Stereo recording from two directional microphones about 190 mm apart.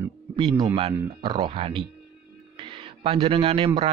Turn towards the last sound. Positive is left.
turn(degrees=-30)  # may be behind; listen again after turning